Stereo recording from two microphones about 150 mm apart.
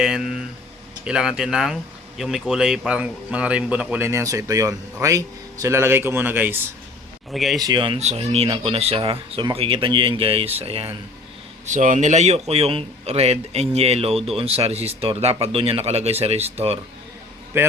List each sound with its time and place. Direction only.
0.0 s speech: 5° right (ahead or behind)
7.3 s a man's voice: centre (ahead or behind)
7.6 s speech: 30° right (ahead or behind)
7.9 s speech: 45° right (ahead or behind)
11.6 s a man's voice: 55° right (ahead or behind)
17.5 s speech: 15° right (ahead or behind)